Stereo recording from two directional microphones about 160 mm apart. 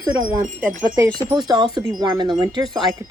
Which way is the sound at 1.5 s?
25° right (ahead or behind).